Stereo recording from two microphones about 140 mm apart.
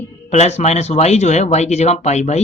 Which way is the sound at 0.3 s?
55° left (ahead or behind).